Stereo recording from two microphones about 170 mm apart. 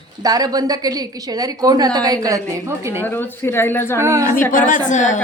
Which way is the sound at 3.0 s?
10° left (ahead or behind).